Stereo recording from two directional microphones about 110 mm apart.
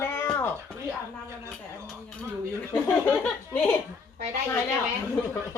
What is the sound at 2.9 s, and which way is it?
Laughter, 10° left (ahead or behind).